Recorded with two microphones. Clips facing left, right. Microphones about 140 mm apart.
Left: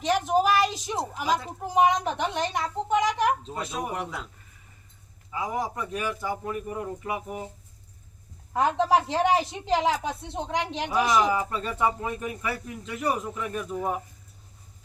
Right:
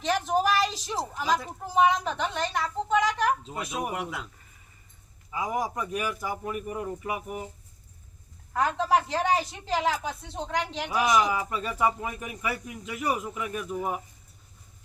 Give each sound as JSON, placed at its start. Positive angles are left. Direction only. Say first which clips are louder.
{"t": 0.0, "sound": "a sound", "louder": "left 2 dB", "side_deg": 15}
{"t": 3.7, "sound": "speech", "louder": "right 1 dB", "side_deg": -10}
{"t": 5.3, "sound": "speech", "louder": "even", "side_deg": -15}
{"t": 8.5, "sound": "a woman's voice", "louder": "left 2 dB", "side_deg": 25}
{"t": 11.3, "sound": "speech", "louder": "left 1 dB", "side_deg": -10}